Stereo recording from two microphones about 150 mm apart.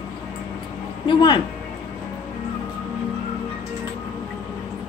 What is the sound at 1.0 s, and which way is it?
Speech, 30° left (ahead or behind).